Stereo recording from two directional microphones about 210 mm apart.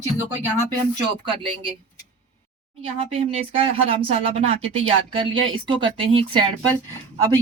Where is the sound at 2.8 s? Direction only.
30° right (ahead or behind).